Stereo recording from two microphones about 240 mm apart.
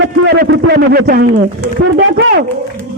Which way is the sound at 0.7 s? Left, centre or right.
Right.